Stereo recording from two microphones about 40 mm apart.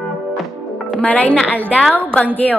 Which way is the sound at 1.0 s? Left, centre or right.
Left.